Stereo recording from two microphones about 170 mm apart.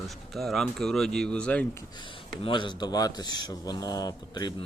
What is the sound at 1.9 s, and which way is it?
A man's voice, 30° left (ahead or behind).